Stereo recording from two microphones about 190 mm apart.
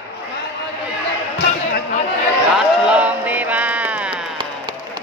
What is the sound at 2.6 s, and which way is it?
Music, 5° right (ahead or behind).